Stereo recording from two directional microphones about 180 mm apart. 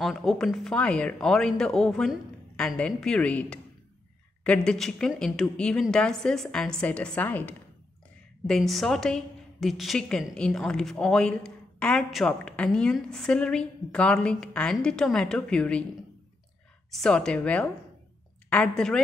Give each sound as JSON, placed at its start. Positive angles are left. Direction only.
{"t": 0.0, "sound": "a woman's voice", "side_deg": 0}
{"t": 16.9, "sound": "a woman's voice", "side_deg": 5}